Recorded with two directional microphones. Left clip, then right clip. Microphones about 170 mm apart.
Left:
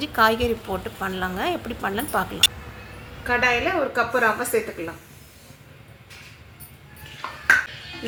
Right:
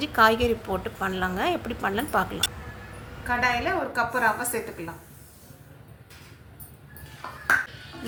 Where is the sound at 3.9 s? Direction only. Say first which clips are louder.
Left 3 dB; 35° left (ahead or behind).